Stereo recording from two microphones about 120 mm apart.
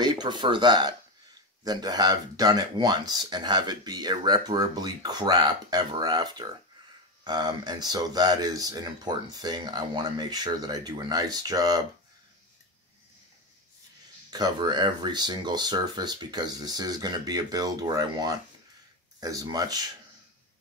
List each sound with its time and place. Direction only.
0.0 s speech: 40° right (ahead or behind)
14.3 s speech: 35° right (ahead or behind)